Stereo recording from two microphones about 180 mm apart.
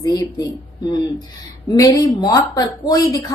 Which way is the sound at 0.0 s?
20° left (ahead or behind).